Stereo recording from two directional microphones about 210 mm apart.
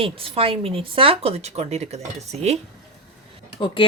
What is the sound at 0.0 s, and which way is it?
Speech, 25° right (ahead or behind).